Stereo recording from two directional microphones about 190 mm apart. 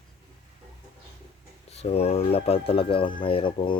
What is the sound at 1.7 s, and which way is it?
Speech, 35° left (ahead or behind).